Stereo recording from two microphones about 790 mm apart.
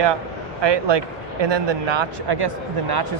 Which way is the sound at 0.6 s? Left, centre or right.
Right.